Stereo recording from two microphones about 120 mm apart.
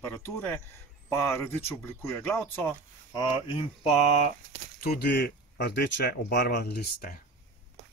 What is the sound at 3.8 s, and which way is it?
Speech, 60° left (ahead or behind).